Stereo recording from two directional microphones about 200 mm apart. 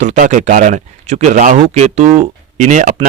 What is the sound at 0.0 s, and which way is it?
A man's voice, 35° right (ahead or behind).